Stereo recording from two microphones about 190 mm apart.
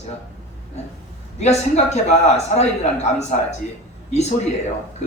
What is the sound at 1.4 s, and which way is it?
Speech, 35° left (ahead or behind).